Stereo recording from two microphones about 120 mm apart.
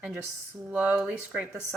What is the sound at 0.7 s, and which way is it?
Speech, 15° right (ahead or behind).